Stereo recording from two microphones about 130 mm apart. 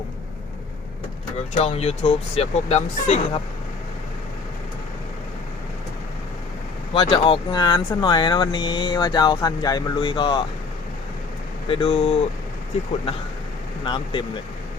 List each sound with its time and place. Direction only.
1.5 s speech: 50° left (ahead or behind)
6.9 s speech: 40° left (ahead or behind)
11.7 s speech: 45° left (ahead or behind)
13.8 s speech: 40° left (ahead or behind)